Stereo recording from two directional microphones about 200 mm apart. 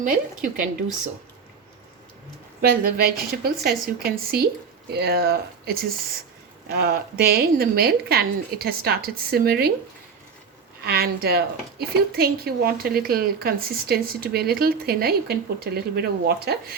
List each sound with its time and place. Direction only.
0.0 s a woman's voice: 45° right (ahead or behind)
2.6 s a woman's voice: 50° right (ahead or behind)
10.8 s a woman's voice: 50° right (ahead or behind)